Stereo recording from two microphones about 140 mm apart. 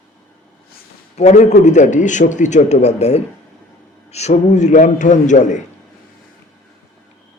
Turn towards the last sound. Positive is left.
turn(degrees=60)  # may be behind; listen again after turning